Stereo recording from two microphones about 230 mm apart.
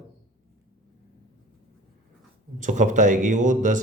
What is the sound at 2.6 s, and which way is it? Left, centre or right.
Speech, right.